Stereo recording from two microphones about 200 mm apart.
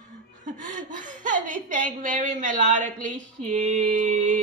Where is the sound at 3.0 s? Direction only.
35° right (ahead or behind).